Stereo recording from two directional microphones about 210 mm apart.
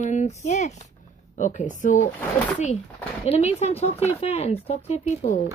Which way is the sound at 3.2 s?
30° left (ahead or behind).